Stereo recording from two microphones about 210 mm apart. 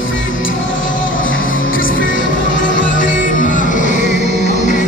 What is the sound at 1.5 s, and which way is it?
Music, 45° left (ahead or behind).